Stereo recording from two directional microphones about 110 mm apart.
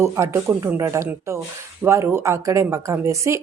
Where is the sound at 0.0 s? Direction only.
25° right (ahead or behind).